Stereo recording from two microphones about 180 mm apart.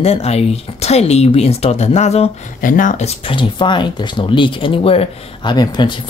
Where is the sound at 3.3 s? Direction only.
25° left (ahead or behind).